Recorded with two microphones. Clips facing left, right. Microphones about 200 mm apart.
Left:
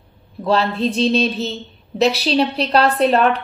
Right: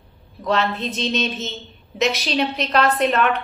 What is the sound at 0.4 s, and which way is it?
A woman's voice, 35° left (ahead or behind).